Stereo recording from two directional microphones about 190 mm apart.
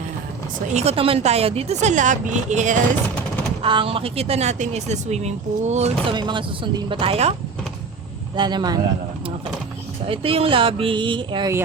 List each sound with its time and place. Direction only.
0.7 s speech: 35° right (ahead or behind)
3.6 s speech: 30° right (ahead or behind)
6.1 s speech: 25° right (ahead or behind)
8.4 s speech: 25° right (ahead or behind)
10.1 s speech: 30° right (ahead or behind)